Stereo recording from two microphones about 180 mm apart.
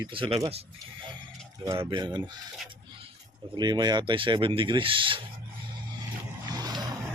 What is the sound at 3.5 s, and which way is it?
Speech, 25° right (ahead or behind).